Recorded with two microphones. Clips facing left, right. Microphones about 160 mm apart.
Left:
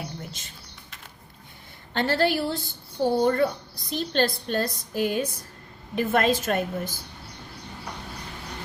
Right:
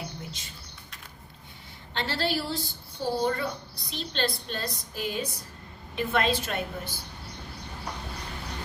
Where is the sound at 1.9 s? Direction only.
50° left (ahead or behind).